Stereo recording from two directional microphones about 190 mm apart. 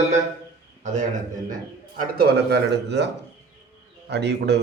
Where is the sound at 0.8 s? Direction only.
40° right (ahead or behind).